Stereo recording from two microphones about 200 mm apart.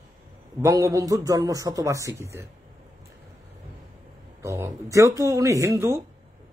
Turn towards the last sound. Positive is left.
turn(degrees=-15)  # may be behind; listen again after turning